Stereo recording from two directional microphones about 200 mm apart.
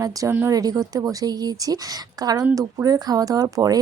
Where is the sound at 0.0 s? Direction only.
15° right (ahead or behind).